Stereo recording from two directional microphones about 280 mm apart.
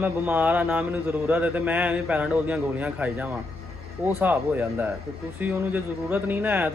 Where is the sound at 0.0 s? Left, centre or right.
Centre.